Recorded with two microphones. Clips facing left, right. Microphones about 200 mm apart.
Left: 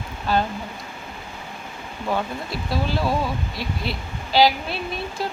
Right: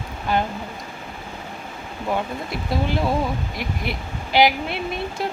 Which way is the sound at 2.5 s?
20° right (ahead or behind).